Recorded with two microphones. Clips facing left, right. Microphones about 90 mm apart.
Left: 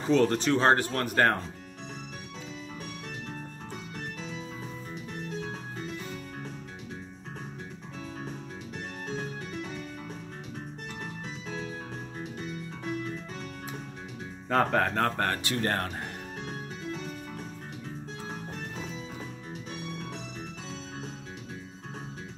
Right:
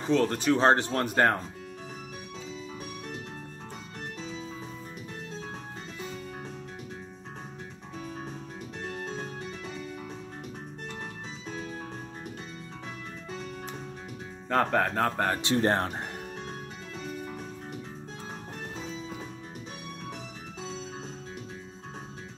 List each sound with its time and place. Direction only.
0.1 s speech: centre (ahead or behind)
0.5 s speech: 20° right (ahead or behind)
14.5 s speech: centre (ahead or behind)
15.4 s speech: 25° right (ahead or behind)